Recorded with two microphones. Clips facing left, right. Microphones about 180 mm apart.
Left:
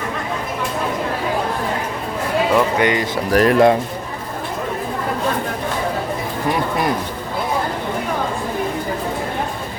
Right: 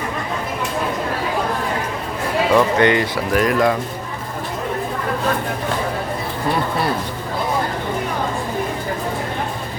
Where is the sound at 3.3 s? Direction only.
30° left (ahead or behind).